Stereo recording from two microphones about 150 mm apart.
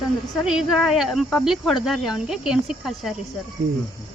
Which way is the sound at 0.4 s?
Centre (ahead or behind).